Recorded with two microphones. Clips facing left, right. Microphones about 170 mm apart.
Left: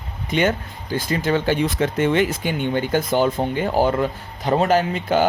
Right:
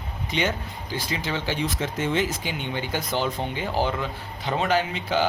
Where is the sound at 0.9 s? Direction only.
50° left (ahead or behind).